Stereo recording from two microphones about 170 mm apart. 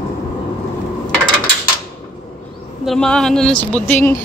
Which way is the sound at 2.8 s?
5° left (ahead or behind).